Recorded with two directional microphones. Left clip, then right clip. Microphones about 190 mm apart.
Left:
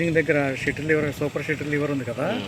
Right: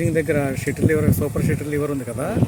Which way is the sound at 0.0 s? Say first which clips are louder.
Even; 35° right (ahead or behind).